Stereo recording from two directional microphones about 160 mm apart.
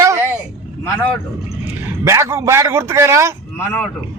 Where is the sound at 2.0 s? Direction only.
20° right (ahead or behind).